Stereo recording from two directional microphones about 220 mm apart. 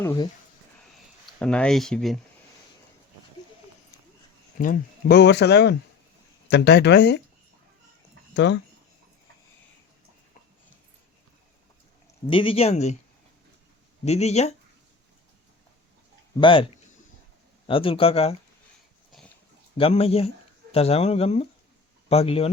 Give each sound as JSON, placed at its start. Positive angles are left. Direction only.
{"t": 0.0, "sound": "speech", "side_deg": 10}
{"t": 1.4, "sound": "speech", "side_deg": 5}
{"t": 4.5, "sound": "speech", "side_deg": 40}
{"t": 8.3, "sound": "speech", "side_deg": 55}
{"t": 12.3, "sound": "speech", "side_deg": 25}
{"t": 14.0, "sound": "speech", "side_deg": 30}
{"t": 16.4, "sound": "speech", "side_deg": 25}
{"t": 17.7, "sound": "speech", "side_deg": 25}
{"t": 19.7, "sound": "speech", "side_deg": 25}